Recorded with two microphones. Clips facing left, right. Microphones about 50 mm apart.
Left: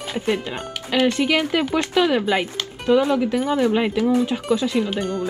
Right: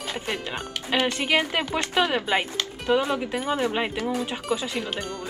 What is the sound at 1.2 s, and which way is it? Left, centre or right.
Speech, centre.